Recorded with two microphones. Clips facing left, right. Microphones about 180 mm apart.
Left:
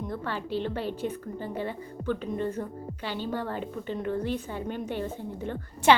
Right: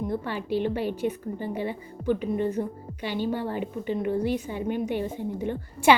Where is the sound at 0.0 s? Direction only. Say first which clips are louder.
Right 4 dB; 10° right (ahead or behind).